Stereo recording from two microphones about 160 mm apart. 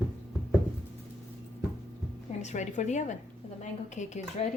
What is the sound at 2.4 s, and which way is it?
Speech, 50° left (ahead or behind).